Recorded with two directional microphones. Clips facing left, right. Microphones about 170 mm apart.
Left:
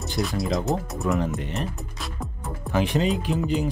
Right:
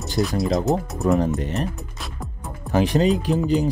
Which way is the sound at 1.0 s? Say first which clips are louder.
Right 6 dB; 40° right (ahead or behind).